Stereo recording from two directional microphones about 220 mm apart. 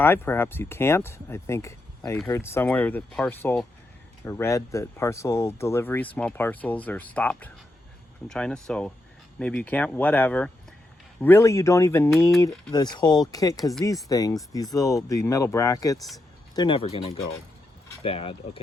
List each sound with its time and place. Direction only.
0.0 s speech: 10° left (ahead or behind); by 18.6 s 25° left (ahead or behind)